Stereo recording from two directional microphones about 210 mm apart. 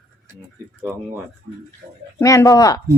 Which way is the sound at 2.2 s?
15° left (ahead or behind).